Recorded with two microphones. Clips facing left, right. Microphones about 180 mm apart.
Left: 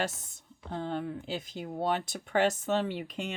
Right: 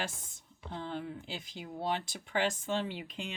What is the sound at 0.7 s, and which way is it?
Speech, 50° left (ahead or behind).